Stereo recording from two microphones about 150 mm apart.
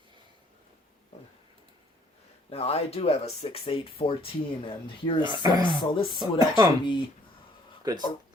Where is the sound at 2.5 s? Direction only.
45° left (ahead or behind).